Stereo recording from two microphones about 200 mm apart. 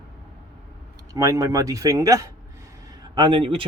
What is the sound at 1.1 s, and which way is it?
Speech, 15° right (ahead or behind).